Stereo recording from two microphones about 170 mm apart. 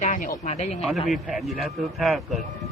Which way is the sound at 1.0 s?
Centre (ahead or behind).